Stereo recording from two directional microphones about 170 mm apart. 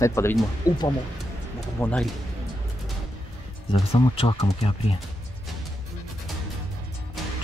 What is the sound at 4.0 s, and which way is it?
Speech, 30° left (ahead or behind).